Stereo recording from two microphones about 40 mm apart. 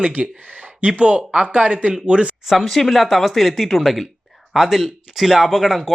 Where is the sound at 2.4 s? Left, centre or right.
Centre.